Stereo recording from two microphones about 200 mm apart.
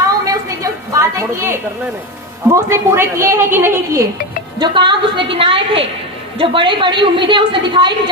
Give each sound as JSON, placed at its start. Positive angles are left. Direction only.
{"t": 0.3, "sound": "a sound", "side_deg": -15}
{"t": 2.5, "sound": "a woman's voice", "side_deg": -10}
{"t": 4.6, "sound": "a woman's voice", "side_deg": -25}